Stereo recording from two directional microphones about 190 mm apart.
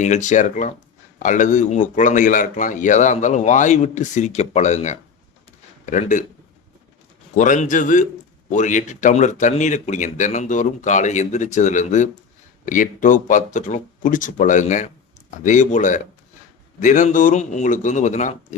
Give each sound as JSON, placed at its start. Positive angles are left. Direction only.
{"t": 0.0, "sound": "a man's voice", "side_deg": 40}
{"t": 7.3, "sound": "speech", "side_deg": 40}